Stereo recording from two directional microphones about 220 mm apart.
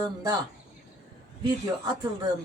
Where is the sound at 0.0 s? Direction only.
15° right (ahead or behind).